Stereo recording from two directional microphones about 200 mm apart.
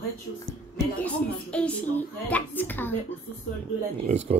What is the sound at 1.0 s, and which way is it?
A woman's voice, 5° left (ahead or behind).